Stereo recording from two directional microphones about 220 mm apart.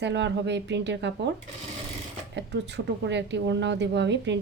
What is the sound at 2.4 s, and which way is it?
A woman's voice, 50° right (ahead or behind).